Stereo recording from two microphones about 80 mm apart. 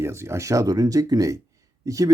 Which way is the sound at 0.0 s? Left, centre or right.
Right.